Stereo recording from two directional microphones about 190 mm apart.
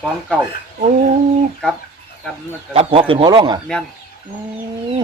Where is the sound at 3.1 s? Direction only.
25° right (ahead or behind).